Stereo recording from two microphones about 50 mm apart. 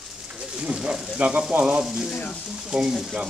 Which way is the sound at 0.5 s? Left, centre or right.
Centre.